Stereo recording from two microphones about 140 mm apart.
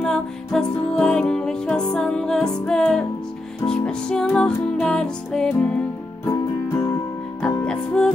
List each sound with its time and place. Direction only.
0.0 s music: 5° left (ahead or behind)
6.2 s music: 20° left (ahead or behind)
7.6 s music: 5° left (ahead or behind)